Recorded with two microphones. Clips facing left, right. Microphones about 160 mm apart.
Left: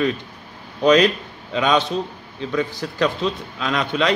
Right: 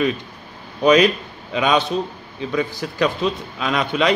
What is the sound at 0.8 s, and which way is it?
A man's voice, 10° right (ahead or behind).